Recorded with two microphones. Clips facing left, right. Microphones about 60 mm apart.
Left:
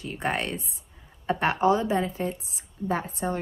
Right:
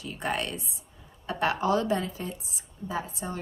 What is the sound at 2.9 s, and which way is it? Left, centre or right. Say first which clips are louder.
Speech: left 5 dB; left.